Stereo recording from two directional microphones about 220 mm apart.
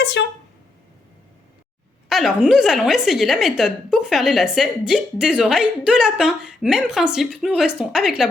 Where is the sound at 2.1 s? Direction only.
Centre (ahead or behind).